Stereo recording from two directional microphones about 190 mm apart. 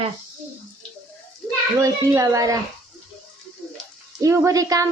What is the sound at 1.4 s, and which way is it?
Children playing, 5° left (ahead or behind).